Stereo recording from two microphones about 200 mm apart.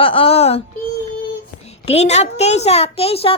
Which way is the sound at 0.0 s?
25° left (ahead or behind).